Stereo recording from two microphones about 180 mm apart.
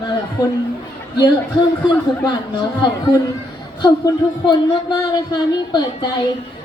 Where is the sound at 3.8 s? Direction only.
25° left (ahead or behind).